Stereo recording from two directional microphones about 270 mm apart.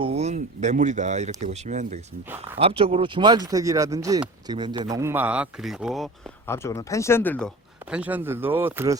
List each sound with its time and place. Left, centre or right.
0.0 s speech: right; by 6.1 s centre
6.5 s speech: centre